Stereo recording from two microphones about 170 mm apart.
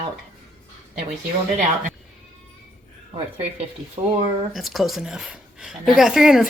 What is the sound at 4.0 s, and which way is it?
Speech, 35° right (ahead or behind).